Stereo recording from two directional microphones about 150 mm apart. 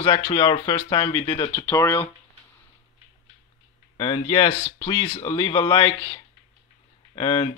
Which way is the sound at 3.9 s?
30° left (ahead or behind).